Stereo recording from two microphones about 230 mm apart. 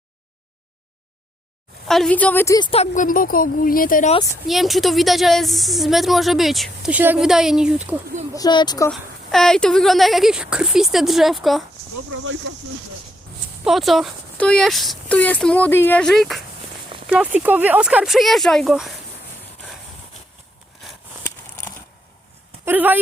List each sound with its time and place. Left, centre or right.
1.9 s a woman's voice: centre; by 4.1 s left
4.4 s a woman's voice: centre
8.4 s speech: centre
8.9 s a woman's voice: centre
12.1 s speech: right
13.7 s a woman's voice: centre
22.6 s speech: centre